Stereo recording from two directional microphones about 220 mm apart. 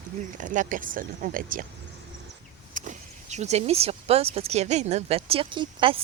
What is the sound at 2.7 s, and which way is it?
Speech, 35° right (ahead or behind).